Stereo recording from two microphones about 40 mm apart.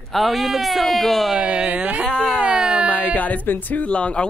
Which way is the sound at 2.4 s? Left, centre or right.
Right.